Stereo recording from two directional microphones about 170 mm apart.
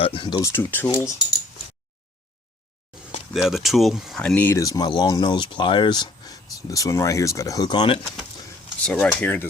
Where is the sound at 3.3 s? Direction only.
Centre (ahead or behind); by 8.0 s 25° left (ahead or behind).